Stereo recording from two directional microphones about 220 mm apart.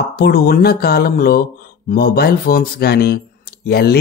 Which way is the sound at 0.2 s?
45° left (ahead or behind).